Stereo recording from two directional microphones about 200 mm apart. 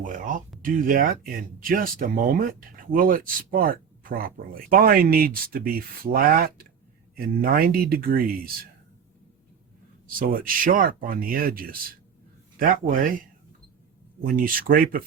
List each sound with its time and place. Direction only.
0.0 s a sound: 40° right (ahead or behind)
0.6 s speech: 45° right (ahead or behind)
10.2 s speech: 45° right (ahead or behind)
14.3 s speech: 45° right (ahead or behind)